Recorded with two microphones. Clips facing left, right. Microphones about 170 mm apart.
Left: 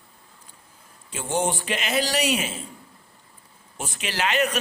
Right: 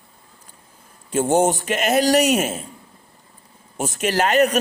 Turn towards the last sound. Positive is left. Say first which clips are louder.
# right 7 dB
turn(degrees=-45)  # may be behind; listen again after turning